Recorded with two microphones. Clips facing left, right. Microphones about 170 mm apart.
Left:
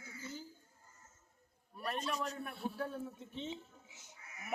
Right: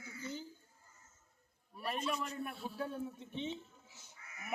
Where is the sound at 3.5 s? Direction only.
20° left (ahead or behind).